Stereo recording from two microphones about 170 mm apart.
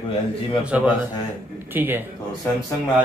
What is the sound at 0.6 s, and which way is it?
A man's voice, 10° right (ahead or behind).